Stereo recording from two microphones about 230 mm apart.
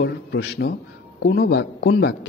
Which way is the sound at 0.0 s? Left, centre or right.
Left.